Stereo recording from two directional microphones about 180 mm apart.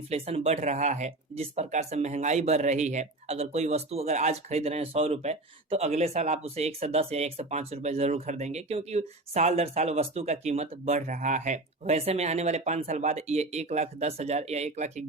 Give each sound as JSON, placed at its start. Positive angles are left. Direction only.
{"t": 0.1, "sound": "speech", "side_deg": -35}